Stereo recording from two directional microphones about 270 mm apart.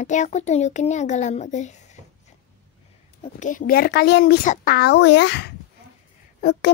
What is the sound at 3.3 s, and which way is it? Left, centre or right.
A child's voice, left.